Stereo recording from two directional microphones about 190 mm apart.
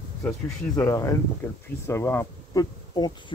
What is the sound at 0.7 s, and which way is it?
Speech, 15° left (ahead or behind).